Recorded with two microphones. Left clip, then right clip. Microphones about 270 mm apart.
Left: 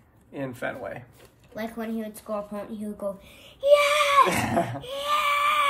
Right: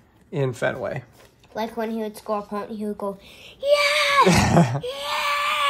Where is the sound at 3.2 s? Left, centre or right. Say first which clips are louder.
Left 1 dB; right.